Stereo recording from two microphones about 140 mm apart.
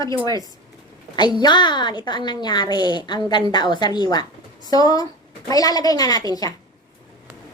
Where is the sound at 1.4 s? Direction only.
30° left (ahead or behind).